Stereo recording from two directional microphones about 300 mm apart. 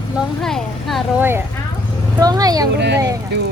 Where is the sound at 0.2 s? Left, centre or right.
Centre.